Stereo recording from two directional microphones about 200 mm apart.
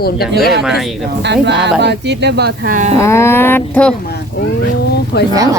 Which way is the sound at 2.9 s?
15° left (ahead or behind).